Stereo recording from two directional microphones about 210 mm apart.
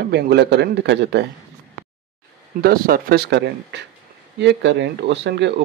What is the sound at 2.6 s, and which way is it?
Speech, 45° right (ahead or behind).